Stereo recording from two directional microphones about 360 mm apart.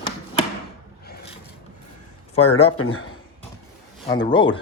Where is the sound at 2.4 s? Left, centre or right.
Centre.